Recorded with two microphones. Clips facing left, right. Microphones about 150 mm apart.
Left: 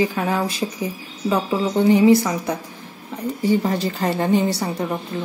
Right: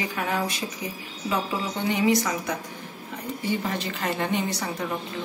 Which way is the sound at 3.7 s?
35° left (ahead or behind).